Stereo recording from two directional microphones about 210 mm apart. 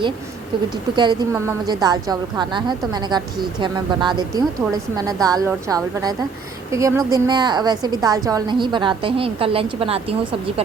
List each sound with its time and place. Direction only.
0.9 s a woman's voice: 15° right (ahead or behind)